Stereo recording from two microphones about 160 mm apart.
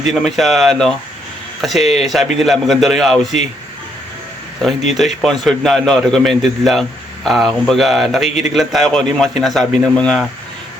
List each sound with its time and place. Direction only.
0.1 s a man's voice: centre (ahead or behind)
4.9 s a man's voice: centre (ahead or behind)